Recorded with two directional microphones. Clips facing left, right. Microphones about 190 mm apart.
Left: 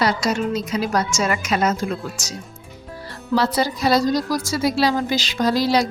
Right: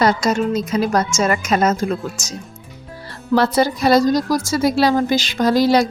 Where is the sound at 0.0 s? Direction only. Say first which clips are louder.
Right 4 dB; 45° right (ahead or behind).